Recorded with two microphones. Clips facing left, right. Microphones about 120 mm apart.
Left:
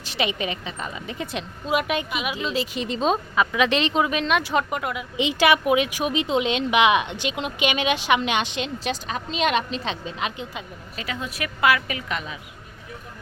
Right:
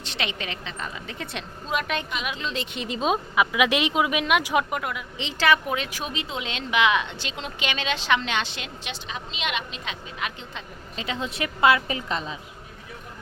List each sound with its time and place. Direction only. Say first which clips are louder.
0.0 s a woman's voice: left 6 dB; 5° left (ahead or behind); by 4.6 s 10° right (ahead or behind)
4.7 s a woman's voice: left 2 dB; centre (ahead or behind)
5.1 s speech: left 3 dB; 15° left (ahead or behind)
8.8 s a woman's voice: left 7 dB; 45° left (ahead or behind); by 10.3 s 25° left (ahead or behind)
10.9 s a woman's voice: right 1 dB; 25° right (ahead or behind)